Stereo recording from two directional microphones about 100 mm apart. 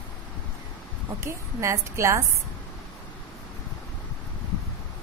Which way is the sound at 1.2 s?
30° right (ahead or behind).